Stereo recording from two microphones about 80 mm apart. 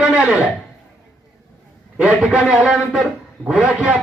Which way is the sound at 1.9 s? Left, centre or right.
Centre.